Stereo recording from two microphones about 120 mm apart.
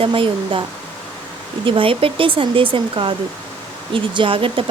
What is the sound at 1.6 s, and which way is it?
Speech, 45° right (ahead or behind).